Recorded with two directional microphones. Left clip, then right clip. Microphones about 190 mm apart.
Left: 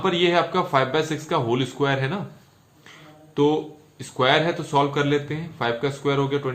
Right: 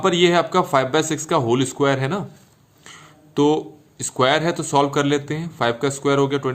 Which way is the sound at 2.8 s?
45° right (ahead or behind).